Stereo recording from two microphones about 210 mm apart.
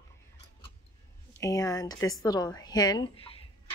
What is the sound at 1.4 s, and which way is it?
A woman's voice, 15° left (ahead or behind).